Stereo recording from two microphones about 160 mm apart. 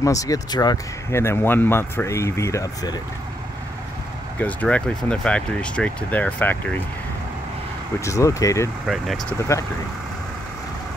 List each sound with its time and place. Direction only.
0.0 s speech: 20° left (ahead or behind)
4.4 s speech: 10° left (ahead or behind)
8.0 s speech: 20° left (ahead or behind)
8.8 s speech: centre (ahead or behind)